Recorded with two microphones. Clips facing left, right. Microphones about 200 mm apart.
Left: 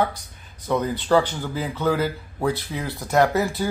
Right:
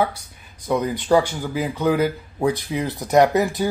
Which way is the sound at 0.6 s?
15° right (ahead or behind).